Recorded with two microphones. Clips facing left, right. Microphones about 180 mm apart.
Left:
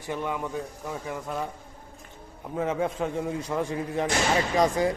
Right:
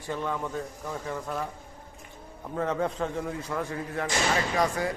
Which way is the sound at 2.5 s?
10° left (ahead or behind).